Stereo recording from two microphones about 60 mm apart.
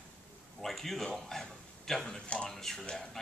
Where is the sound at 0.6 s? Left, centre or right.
Centre.